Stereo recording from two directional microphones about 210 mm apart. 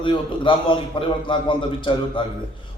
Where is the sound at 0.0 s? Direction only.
25° left (ahead or behind).